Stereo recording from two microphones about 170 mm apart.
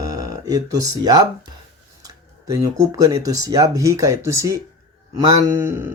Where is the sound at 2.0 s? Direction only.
20° right (ahead or behind).